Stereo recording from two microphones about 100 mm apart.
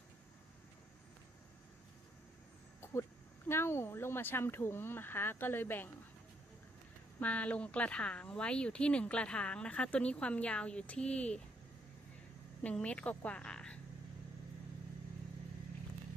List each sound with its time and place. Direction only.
2.8 s speech: 25° left (ahead or behind)
7.2 s speech: 15° left (ahead or behind)
12.6 s a woman's voice: 10° left (ahead or behind)